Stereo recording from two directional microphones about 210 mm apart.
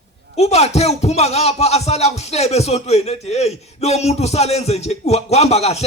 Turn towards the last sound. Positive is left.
turn(degrees=30)  # may be behind; listen again after turning